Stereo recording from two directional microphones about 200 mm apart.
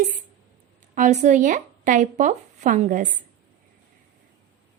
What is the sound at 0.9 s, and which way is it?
Speech, 35° right (ahead or behind).